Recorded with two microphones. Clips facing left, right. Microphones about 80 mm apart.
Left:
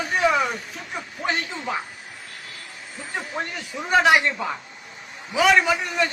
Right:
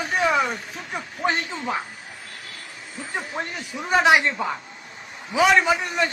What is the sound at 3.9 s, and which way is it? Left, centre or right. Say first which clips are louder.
Speech: even; centre.